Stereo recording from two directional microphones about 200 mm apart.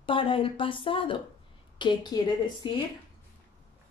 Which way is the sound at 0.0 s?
25° left (ahead or behind).